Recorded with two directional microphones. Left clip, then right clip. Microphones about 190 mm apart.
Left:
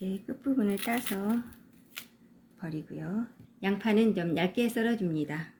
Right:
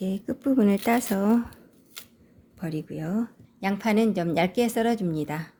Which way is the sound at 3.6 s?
30° right (ahead or behind).